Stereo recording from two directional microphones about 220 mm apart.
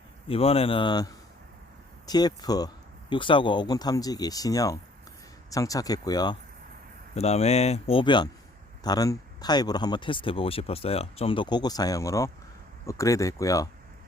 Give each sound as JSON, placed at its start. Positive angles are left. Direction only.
{"t": 0.3, "sound": "speech", "side_deg": 25}
{"t": 7.1, "sound": "speech", "side_deg": 30}